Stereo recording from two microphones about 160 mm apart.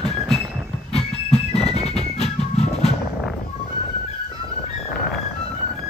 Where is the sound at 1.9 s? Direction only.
40° left (ahead or behind).